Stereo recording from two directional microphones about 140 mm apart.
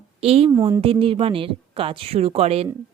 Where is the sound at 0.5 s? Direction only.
20° right (ahead or behind).